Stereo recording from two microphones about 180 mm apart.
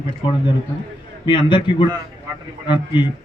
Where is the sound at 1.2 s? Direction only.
25° left (ahead or behind).